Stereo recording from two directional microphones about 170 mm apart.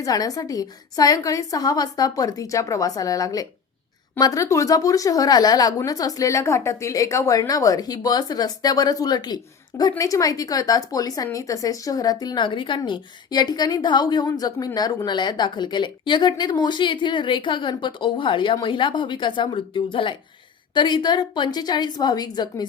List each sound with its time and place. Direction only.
0.0 s a woman's voice: 20° left (ahead or behind)